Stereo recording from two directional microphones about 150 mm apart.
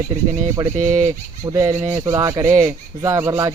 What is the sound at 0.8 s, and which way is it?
Speech, 55° right (ahead or behind).